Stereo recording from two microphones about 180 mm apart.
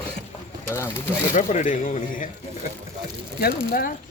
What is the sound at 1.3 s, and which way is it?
Speech, 45° left (ahead or behind).